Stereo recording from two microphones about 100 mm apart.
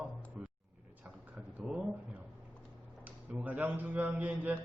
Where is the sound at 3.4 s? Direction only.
15° right (ahead or behind).